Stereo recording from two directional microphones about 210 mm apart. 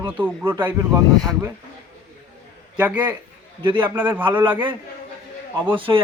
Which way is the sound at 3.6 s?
25° right (ahead or behind).